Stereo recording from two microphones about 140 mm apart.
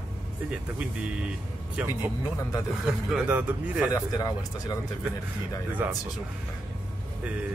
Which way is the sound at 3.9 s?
25° left (ahead or behind).